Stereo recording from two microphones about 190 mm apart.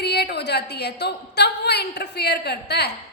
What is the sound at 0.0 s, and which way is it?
A woman's voice, 60° left (ahead or behind).